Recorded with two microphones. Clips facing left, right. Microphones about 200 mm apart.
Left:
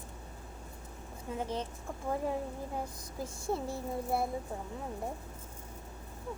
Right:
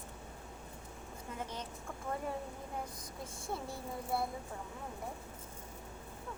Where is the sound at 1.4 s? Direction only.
30° left (ahead or behind).